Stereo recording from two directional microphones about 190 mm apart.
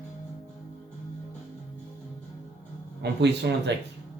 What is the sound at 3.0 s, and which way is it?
Speech, 60° right (ahead or behind).